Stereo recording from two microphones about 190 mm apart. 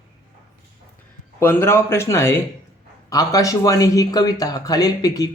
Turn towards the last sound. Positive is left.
turn(degrees=20)  # may be behind; listen again after turning